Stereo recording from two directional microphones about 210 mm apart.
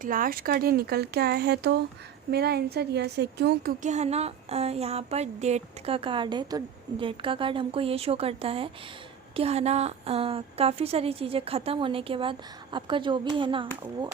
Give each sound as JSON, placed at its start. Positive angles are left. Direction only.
{"t": 0.0, "sound": "a woman's voice", "side_deg": -40}